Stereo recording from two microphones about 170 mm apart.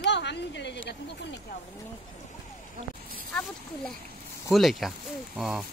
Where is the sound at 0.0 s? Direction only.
90° left.